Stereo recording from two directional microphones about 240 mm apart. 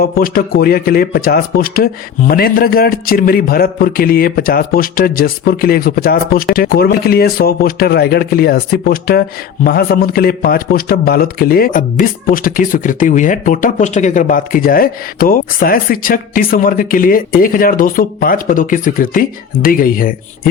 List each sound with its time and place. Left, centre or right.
0.0 s a man's voice: left